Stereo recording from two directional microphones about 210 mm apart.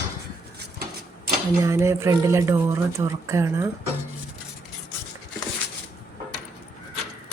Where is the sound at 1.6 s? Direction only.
15° right (ahead or behind).